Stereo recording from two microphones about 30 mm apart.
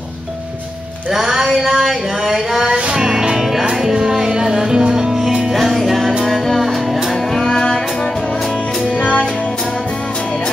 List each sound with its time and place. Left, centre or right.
1.1 s a sound: centre
2.6 s music: right
5.5 s music: centre
6.6 s music: centre